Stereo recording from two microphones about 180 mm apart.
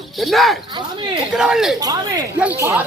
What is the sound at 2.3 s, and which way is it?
Speech, 10° right (ahead or behind).